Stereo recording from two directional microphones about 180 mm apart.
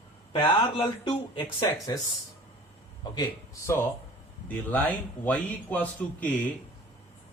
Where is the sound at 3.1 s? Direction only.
20° left (ahead or behind).